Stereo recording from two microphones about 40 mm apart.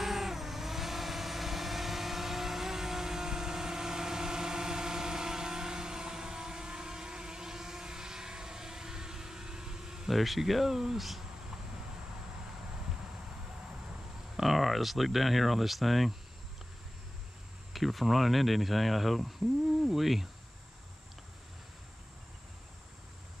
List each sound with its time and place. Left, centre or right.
0.0 s vehicle: centre
10.1 s speech: centre
14.3 s speech: centre
17.7 s speech: centre
19.8 s a sound: centre